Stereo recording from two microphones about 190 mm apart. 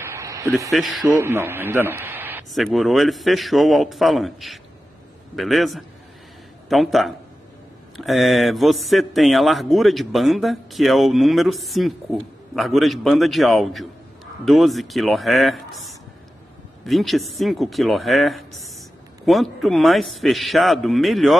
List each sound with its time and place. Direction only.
0.0 s a sound: 15° right (ahead or behind)
0.7 s a man's voice: centre (ahead or behind)
1.0 s speech: 15° right (ahead or behind)
2.5 s a man's voice: centre (ahead or behind)